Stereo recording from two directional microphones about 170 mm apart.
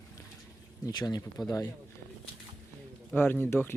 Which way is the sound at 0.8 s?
25° left (ahead or behind).